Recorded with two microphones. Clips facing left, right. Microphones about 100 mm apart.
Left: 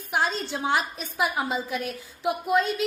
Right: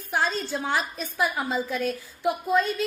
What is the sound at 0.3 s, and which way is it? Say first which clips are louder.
A woman's voice: left 1 dB; 20° left (ahead or behind).